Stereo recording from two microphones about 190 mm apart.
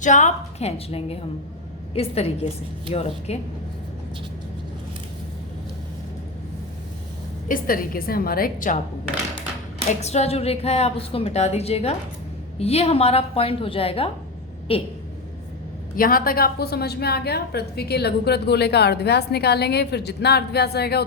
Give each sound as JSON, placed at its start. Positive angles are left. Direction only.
{"t": 0.0, "sound": "a woman's voice", "side_deg": 40}
{"t": 7.4, "sound": "a woman's voice", "side_deg": 45}
{"t": 10.0, "sound": "a woman's voice", "side_deg": 35}
{"t": 16.0, "sound": "a woman's voice", "side_deg": 50}